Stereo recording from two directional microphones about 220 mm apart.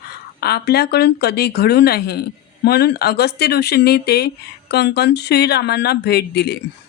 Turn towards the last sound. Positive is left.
turn(degrees=50)  # may be behind; listen again after turning